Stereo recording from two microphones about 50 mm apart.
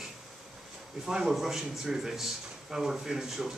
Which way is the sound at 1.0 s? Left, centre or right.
Centre.